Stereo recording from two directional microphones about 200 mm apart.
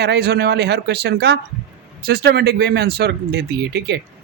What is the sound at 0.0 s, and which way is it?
Speech, 55° right (ahead or behind).